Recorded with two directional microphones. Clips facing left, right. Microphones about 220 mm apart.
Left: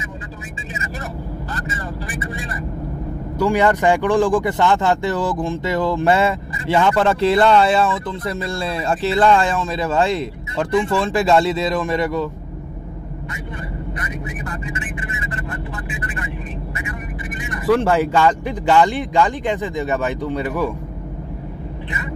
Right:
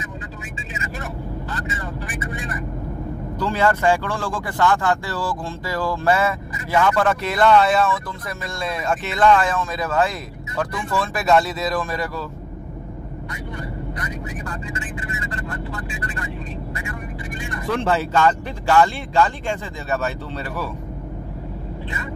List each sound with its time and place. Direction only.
2.1 s speech: 30° left (ahead or behind)
3.3 s speech: 15° left (ahead or behind)
14.7 s speech: 20° left (ahead or behind)
17.4 s speech: 20° left (ahead or behind)